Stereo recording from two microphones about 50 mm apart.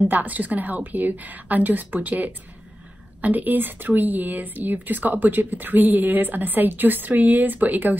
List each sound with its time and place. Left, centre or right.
0.1 s a woman's voice: right